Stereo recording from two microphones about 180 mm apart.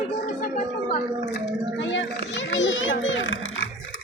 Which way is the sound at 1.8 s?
90° left.